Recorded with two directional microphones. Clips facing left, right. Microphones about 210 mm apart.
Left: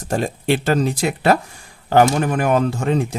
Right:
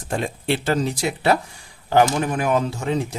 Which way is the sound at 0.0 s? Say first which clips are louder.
Left 4 dB; 45° left (ahead or behind).